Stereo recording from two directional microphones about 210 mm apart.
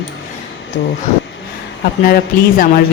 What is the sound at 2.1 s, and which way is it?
Speech, 45° left (ahead or behind).